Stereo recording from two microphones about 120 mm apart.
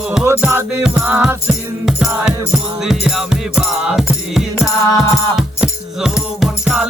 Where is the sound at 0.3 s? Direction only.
20° right (ahead or behind).